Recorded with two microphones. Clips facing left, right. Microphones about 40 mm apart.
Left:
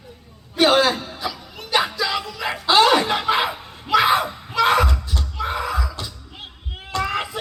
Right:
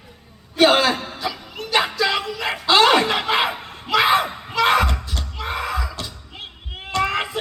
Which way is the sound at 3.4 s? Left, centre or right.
Right.